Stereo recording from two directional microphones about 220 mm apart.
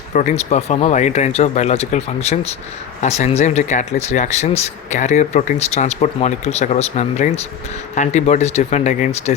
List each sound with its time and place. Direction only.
0.1 s speech: 35° left (ahead or behind)